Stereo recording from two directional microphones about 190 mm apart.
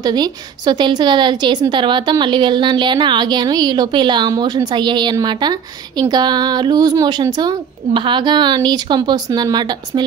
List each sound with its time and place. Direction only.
0.0 s a woman's voice: 20° right (ahead or behind)